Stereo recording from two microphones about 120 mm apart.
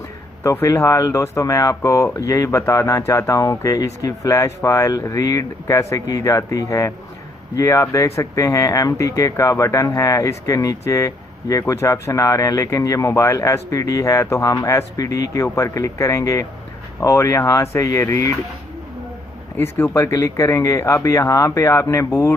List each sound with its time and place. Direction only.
0.4 s speech: 25° left (ahead or behind)
19.8 s speech: 20° left (ahead or behind)